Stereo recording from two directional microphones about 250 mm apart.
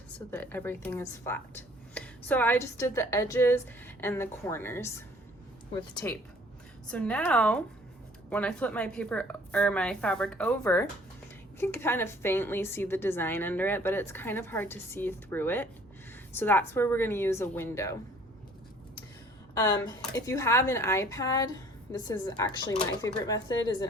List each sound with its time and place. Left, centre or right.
0.3 s a woman's voice: centre
6.9 s a woman's voice: centre
19.5 s a woman's voice: centre